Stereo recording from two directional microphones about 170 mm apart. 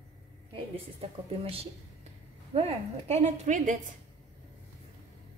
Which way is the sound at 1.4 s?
35° right (ahead or behind).